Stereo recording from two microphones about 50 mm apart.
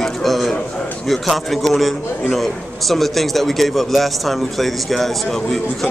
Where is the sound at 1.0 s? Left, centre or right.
Centre.